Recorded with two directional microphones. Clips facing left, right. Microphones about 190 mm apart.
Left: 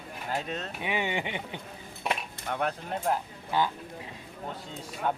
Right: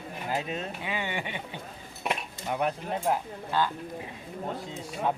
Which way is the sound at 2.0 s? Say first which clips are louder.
Right 1 dB; 5° right (ahead or behind).